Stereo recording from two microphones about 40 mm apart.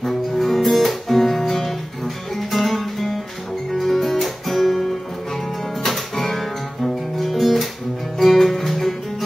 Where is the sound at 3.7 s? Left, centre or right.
Centre.